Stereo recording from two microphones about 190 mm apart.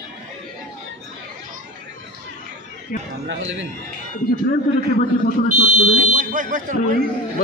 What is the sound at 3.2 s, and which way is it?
Speech, 80° right.